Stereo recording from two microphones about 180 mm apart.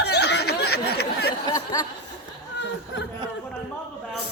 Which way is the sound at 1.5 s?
25° left (ahead or behind).